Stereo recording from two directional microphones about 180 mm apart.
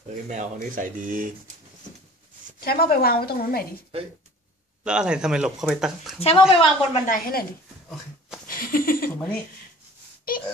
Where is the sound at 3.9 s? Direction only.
35° right (ahead or behind).